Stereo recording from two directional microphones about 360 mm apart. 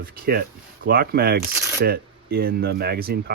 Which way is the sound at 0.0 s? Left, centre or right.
Right.